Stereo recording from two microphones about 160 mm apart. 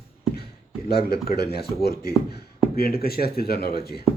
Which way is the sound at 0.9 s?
75° left (ahead or behind).